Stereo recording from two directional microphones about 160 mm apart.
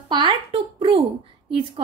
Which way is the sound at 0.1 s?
30° right (ahead or behind).